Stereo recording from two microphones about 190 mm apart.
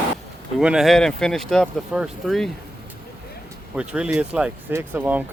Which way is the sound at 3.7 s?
5° right (ahead or behind).